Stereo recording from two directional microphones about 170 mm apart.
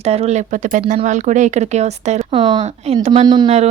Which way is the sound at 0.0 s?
40° right (ahead or behind).